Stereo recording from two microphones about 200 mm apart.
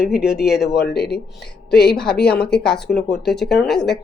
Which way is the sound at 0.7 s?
55° left (ahead or behind).